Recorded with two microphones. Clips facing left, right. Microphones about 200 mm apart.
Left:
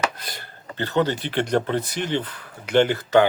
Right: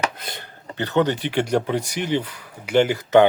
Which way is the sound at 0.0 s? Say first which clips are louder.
Even; 20° right (ahead or behind).